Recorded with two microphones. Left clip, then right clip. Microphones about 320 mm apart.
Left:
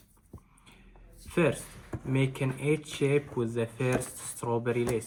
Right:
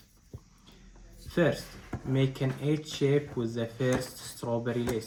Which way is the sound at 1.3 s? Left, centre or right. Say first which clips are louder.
Even; left.